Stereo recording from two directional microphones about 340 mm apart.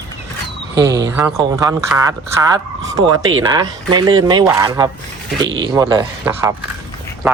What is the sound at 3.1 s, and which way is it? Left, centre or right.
Speech, right.